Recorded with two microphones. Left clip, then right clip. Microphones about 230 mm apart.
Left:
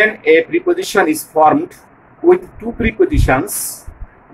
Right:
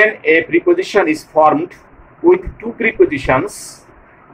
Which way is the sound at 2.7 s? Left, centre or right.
Left.